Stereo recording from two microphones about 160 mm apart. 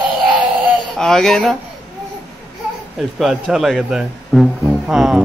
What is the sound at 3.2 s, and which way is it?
Speech, 5° right (ahead or behind).